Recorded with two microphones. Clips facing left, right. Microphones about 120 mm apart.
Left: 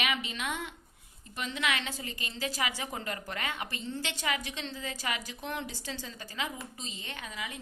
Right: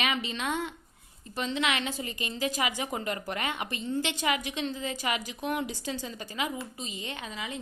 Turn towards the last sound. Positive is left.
turn(degrees=-25)  # may be behind; listen again after turning